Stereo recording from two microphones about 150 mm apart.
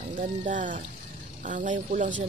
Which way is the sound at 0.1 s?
60° right (ahead or behind).